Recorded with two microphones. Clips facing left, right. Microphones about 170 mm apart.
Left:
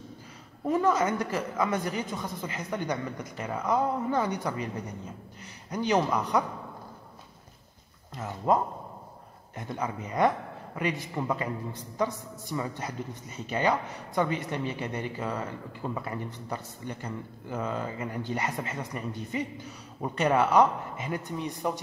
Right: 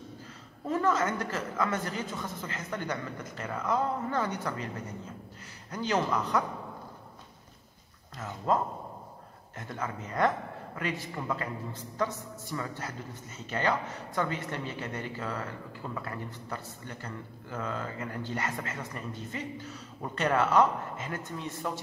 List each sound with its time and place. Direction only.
0.7 s a man's voice: 15° left (ahead or behind)
5.7 s a man's voice: 15° left (ahead or behind)
9.6 s a man's voice: 15° left (ahead or behind)